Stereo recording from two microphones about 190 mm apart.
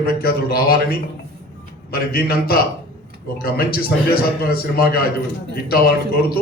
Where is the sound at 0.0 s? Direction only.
55° left (ahead or behind).